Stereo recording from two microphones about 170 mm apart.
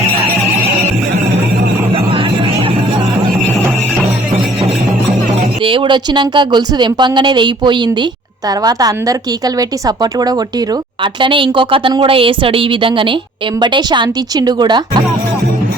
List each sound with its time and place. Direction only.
5.6 s a woman's voice: 30° right (ahead or behind)